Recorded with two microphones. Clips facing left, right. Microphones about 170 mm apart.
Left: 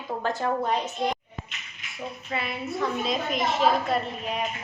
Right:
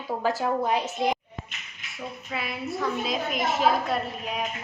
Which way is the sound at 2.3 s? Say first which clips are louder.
Left 1 dB; centre (ahead or behind).